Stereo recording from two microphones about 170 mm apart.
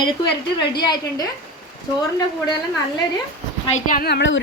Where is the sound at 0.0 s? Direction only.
25° left (ahead or behind).